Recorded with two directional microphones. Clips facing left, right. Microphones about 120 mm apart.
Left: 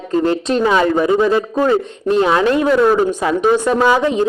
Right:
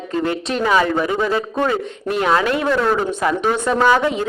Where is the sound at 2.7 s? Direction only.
10° left (ahead or behind).